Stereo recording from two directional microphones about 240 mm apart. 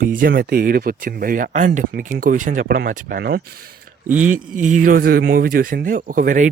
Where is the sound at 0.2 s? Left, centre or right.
Right.